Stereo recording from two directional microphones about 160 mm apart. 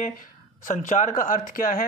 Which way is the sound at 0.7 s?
50° left (ahead or behind).